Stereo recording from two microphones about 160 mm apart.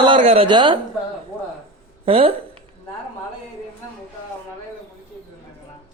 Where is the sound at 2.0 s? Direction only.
35° right (ahead or behind).